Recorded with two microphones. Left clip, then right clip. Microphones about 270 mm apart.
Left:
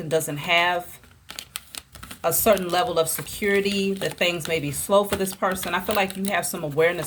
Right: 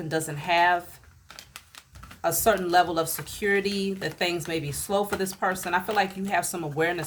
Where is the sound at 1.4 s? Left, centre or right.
Left.